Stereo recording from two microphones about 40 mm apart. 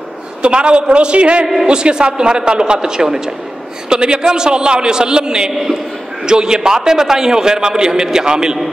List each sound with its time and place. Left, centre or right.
0.4 s a man's voice: right